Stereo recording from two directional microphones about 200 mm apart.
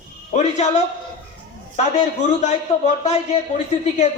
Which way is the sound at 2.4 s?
35° left (ahead or behind).